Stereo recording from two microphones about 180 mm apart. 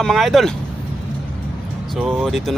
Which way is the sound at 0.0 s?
Centre (ahead or behind).